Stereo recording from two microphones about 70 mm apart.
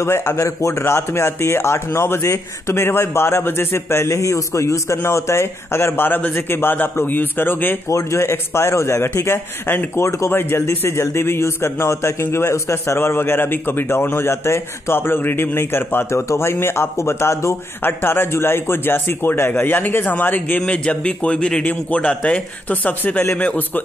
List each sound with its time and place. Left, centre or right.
0.0 s a man's voice: left
4.1 s a man's voice: left
7.9 s a man's voice: left
20.6 s speech: centre